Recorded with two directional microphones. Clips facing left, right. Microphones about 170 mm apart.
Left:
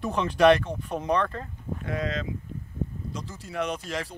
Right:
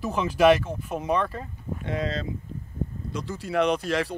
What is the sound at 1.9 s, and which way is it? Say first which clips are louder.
Speech: right 1 dB; 30° right (ahead or behind).